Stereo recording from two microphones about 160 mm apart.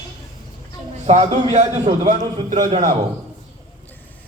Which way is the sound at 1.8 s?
50° right (ahead or behind).